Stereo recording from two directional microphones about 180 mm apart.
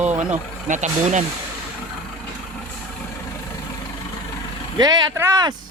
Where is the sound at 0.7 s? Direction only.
40° right (ahead or behind).